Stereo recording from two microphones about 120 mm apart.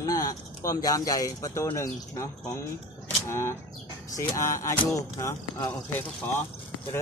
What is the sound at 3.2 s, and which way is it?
Speech, 20° left (ahead or behind).